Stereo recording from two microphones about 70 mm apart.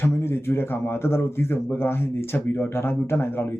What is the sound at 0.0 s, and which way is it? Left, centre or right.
Speech, left.